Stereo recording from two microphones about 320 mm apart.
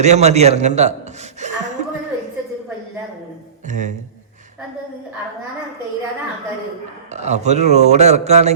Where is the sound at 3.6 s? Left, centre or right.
Right.